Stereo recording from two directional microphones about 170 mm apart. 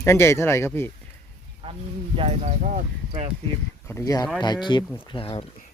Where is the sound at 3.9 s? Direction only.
20° left (ahead or behind).